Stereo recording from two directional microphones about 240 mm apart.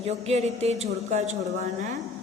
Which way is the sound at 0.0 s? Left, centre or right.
Right.